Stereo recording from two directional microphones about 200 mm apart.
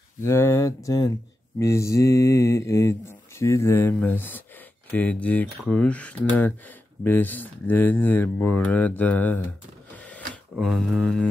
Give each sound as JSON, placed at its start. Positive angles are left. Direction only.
{"t": 0.2, "sound": "speech", "side_deg": 15}
{"t": 10.5, "sound": "speech", "side_deg": 0}